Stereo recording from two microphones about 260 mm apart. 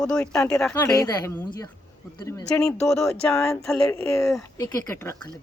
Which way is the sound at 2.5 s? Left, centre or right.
Centre.